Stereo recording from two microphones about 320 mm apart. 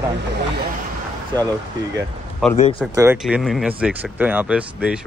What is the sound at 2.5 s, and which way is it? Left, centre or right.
Speech, centre.